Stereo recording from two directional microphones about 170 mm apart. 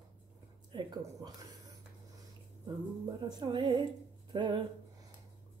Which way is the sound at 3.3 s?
25° right (ahead or behind).